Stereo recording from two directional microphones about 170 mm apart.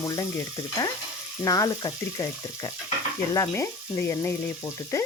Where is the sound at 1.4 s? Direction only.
20° left (ahead or behind).